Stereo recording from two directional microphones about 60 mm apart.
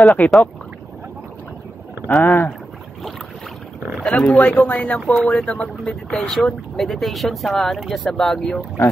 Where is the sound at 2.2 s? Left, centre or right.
Left.